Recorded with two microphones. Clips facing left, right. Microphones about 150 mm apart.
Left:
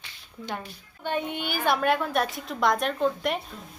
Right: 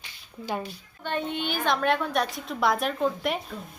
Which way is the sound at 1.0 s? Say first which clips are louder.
Even; 10° left (ahead or behind).